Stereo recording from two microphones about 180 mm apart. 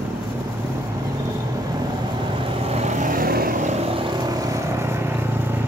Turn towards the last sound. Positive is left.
turn(degrees=-15)  # may be behind; listen again after turning